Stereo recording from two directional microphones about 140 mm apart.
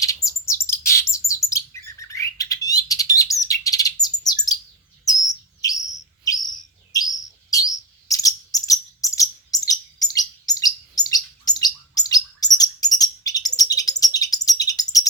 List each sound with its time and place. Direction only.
0.0 s bird: 25° left (ahead or behind)
8.5 s cricket: 25° left (ahead or behind)
9.5 s chirp: 25° left (ahead or behind)
10.9 s bird: 25° left (ahead or behind)